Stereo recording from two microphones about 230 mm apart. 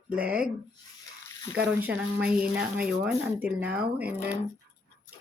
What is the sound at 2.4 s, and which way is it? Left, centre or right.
Speech, centre.